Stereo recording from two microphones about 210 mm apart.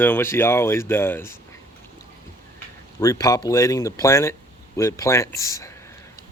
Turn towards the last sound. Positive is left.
turn(degrees=15)  # may be behind; listen again after turning